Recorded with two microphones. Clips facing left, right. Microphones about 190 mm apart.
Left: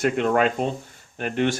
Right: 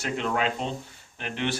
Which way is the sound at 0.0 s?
55° left (ahead or behind).